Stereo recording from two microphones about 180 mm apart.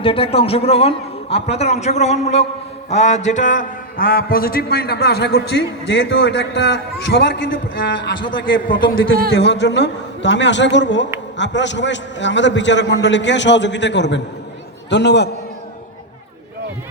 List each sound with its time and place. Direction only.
0.0 s a man's voice: 30° left (ahead or behind); by 7.3 s 75° left (ahead or behind)
7.8 s a man's voice: 85° left
9.3 s a man's voice: 70° left (ahead or behind)